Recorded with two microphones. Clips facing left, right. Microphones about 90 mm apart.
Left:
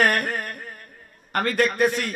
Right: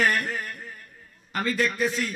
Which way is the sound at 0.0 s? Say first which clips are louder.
Left 3 dB; 55° left (ahead or behind).